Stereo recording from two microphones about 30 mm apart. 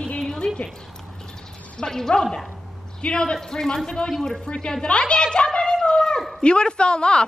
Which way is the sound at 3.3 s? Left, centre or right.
Centre.